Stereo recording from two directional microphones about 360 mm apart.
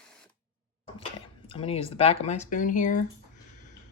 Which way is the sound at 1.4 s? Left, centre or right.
Centre.